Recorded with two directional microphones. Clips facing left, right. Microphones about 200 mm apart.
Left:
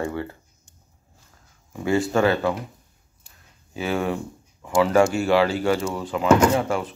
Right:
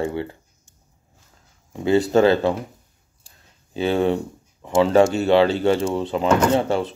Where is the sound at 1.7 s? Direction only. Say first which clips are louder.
Right 4 dB; 25° right (ahead or behind).